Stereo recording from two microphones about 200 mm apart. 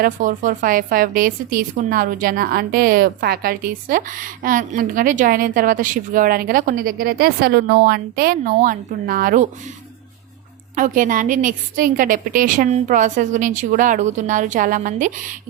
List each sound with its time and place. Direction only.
0.0 s a woman's voice: 40° right (ahead or behind)
10.8 s a woman's voice: 40° right (ahead or behind)